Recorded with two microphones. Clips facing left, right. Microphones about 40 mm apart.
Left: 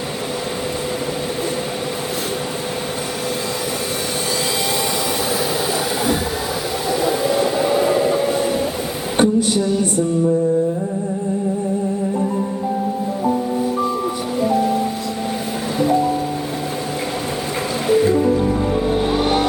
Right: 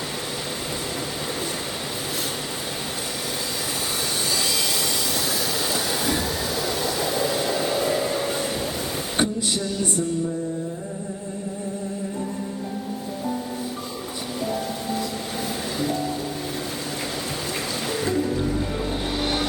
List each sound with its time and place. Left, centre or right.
6.8 s train: centre
7.3 s hair dryer: centre
9.1 s a sound: centre
14.4 s music: centre
15.8 s music: centre
17.8 s music: centre